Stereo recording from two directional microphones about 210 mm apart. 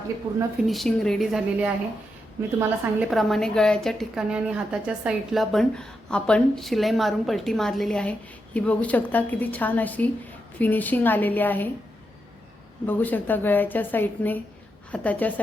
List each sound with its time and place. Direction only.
0.3 s a woman's voice: 20° right (ahead or behind)
0.7 s a woman's voice: centre (ahead or behind)
12.8 s a woman's voice: 10° left (ahead or behind)